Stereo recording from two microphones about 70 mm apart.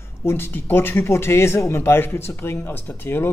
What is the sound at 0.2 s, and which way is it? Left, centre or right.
Speech, left.